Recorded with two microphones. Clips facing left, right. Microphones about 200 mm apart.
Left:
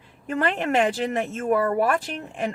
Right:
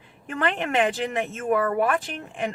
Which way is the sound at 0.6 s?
40° left (ahead or behind).